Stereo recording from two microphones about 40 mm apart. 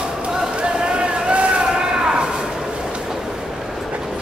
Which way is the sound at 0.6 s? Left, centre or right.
Right.